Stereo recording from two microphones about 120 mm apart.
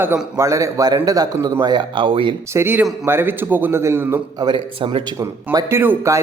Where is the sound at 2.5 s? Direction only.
20° right (ahead or behind).